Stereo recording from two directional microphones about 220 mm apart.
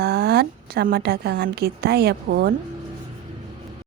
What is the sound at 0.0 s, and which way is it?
A woman's voice, 45° right (ahead or behind).